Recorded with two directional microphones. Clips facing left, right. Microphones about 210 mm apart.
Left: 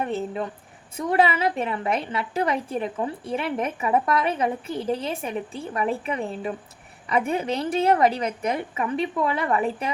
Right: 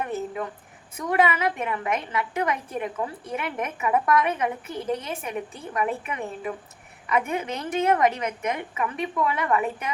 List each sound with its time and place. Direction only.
0.0 s a woman's voice: 30° left (ahead or behind)